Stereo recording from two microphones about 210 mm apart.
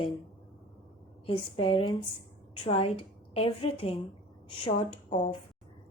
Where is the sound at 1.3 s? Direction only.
25° left (ahead or behind).